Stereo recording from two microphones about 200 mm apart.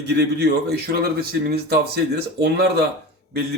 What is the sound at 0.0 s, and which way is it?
A man's voice, 55° right (ahead or behind).